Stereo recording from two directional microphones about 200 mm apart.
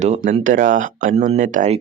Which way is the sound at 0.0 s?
40° right (ahead or behind).